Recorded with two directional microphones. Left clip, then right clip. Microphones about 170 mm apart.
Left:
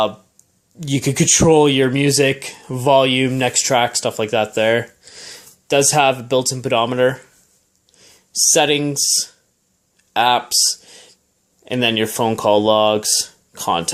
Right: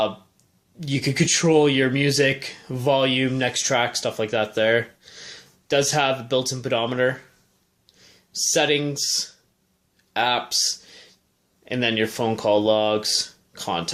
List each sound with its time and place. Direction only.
0.8 s speech: 40° left (ahead or behind)
10.1 s a sound: 40° left (ahead or behind)
11.6 s speech: 40° left (ahead or behind)